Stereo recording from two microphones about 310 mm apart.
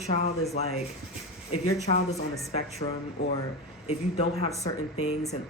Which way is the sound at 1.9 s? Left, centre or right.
Left.